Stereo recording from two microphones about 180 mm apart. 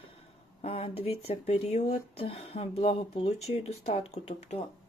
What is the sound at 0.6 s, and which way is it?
Speech, 35° left (ahead or behind).